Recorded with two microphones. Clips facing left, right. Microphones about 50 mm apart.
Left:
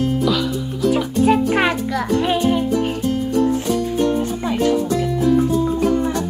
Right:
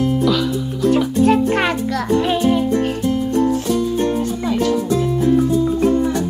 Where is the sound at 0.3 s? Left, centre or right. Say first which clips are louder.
Right 1 dB; centre.